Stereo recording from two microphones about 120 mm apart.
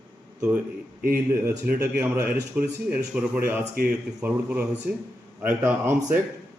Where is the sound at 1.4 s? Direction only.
15° right (ahead or behind).